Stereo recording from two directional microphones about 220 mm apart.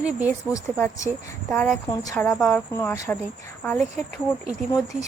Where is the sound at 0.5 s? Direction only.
15° left (ahead or behind).